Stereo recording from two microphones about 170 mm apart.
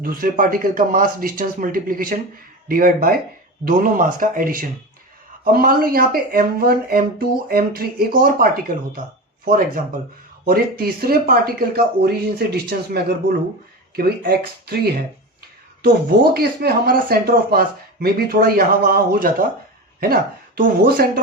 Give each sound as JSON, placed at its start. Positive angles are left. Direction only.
{"t": 0.0, "sound": "speech", "side_deg": -55}
{"t": 15.8, "sound": "speech", "side_deg": -65}
{"t": 20.6, "sound": "speech", "side_deg": -60}